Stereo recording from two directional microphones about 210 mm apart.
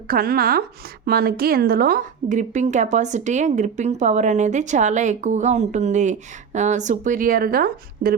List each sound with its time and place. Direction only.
0.1 s a woman's voice: 45° right (ahead or behind)